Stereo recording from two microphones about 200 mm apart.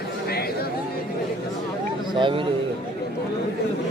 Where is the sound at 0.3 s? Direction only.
50° left (ahead or behind).